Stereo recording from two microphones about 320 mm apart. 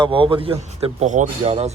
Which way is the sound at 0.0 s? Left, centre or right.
Centre.